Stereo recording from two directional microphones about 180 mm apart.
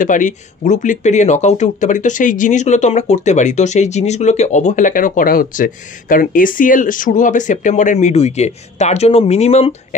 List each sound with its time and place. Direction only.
0.0 s speech: 45° left (ahead or behind)